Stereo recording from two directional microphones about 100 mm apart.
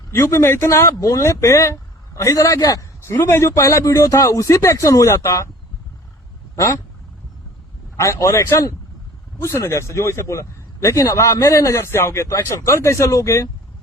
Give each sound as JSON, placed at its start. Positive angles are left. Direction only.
{"t": 0.1, "sound": "speech", "side_deg": 25}
{"t": 6.6, "sound": "speech", "side_deg": 30}
{"t": 7.9, "sound": "a man's voice", "side_deg": 30}